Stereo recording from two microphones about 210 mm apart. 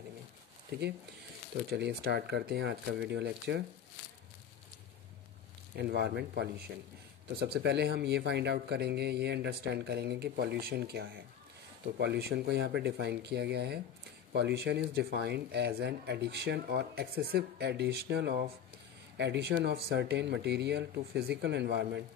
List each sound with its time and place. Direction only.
0.7 s speech: 50° right (ahead or behind)
5.8 s speech: 50° right (ahead or behind)